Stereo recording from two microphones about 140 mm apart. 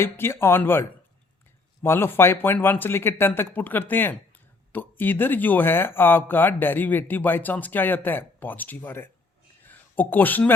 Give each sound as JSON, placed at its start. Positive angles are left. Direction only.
{"t": 0.0, "sound": "speech", "side_deg": 15}